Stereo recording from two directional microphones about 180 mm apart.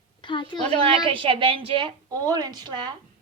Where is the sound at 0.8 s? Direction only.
30° right (ahead or behind).